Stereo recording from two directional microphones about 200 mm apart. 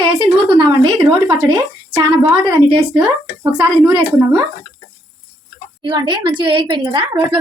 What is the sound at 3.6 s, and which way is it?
Speech, 10° right (ahead or behind).